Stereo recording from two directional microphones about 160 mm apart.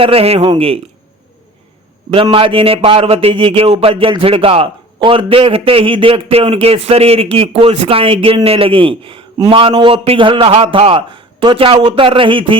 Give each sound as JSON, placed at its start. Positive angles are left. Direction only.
{"t": 0.0, "sound": "speech", "side_deg": -35}
{"t": 2.3, "sound": "speech", "side_deg": -35}